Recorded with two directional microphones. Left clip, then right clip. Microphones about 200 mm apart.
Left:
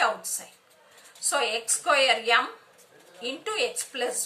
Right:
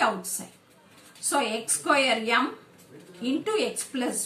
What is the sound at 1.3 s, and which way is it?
A woman's voice, 30° left (ahead or behind).